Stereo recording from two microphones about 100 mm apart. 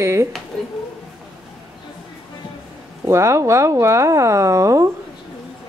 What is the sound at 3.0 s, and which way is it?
Speech, 30° right (ahead or behind).